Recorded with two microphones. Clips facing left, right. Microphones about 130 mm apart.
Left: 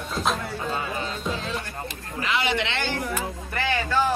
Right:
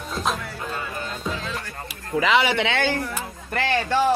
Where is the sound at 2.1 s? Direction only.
90° right.